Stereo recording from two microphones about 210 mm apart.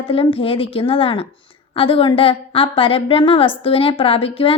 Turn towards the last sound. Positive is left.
turn(degrees=25)  # may be behind; listen again after turning